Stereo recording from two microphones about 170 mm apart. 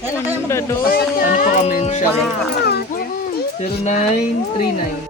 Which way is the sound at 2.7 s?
65° left (ahead or behind).